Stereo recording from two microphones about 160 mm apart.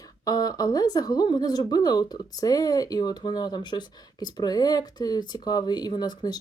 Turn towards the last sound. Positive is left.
turn(degrees=25)  # may be behind; listen again after turning